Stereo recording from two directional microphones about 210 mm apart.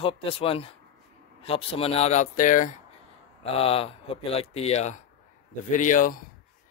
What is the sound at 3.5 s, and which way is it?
Speech, 25° left (ahead or behind).